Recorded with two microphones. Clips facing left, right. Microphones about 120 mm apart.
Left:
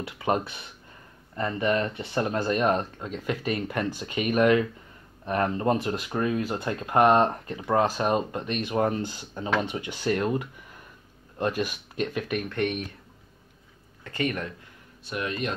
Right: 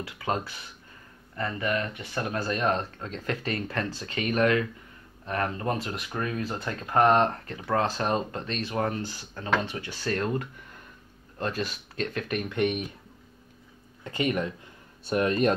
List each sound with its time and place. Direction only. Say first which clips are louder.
0.0 s speech: left 4 dB; 25° left (ahead or behind); by 12.9 s 5° right (ahead or behind)
14.0 s speech: right 2 dB; 20° right (ahead or behind)
15.0 s speech: right 7 dB; 45° right (ahead or behind)